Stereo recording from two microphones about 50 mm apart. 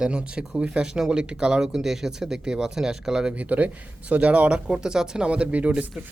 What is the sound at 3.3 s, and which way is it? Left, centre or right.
Speech, right.